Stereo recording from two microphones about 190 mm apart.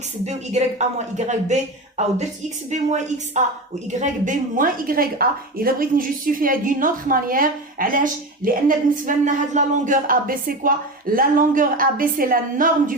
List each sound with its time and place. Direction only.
0.3 s speech: 35° right (ahead or behind)
2.6 s a woman's voice: 40° right (ahead or behind)